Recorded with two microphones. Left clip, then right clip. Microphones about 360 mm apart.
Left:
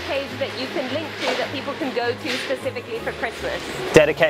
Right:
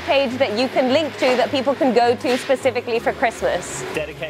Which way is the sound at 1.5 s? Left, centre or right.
Right.